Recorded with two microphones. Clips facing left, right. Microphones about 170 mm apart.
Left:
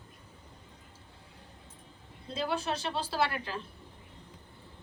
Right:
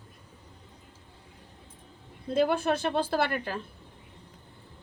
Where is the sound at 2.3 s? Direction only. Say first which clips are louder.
Right 8 dB; 55° right (ahead or behind).